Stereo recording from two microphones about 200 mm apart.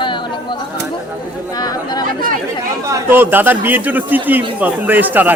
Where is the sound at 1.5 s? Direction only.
20° left (ahead or behind).